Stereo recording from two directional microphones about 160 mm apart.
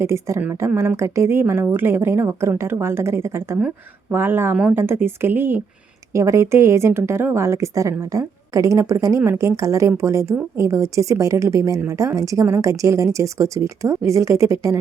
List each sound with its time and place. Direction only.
0.0 s a woman's voice: 15° right (ahead or behind)